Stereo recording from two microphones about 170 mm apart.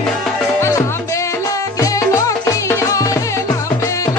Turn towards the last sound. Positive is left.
turn(degrees=20)  # may be behind; listen again after turning